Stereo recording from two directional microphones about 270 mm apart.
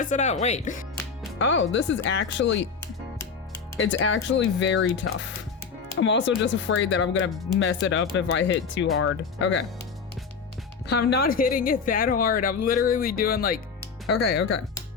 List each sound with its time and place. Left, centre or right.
0.0 s speech: left
1.4 s speech: left
3.8 s speech: left
10.8 s a woman's voice: left